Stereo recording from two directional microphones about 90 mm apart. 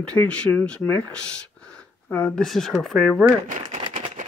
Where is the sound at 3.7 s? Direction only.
65° right (ahead or behind).